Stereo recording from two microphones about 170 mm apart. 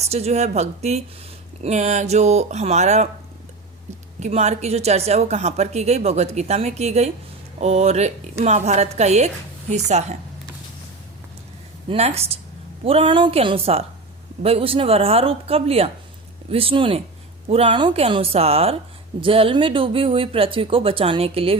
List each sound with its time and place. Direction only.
0.0 s a woman's voice: 40° right (ahead or behind)
4.2 s a woman's voice: 40° right (ahead or behind)
11.9 s a woman's voice: 35° right (ahead or behind)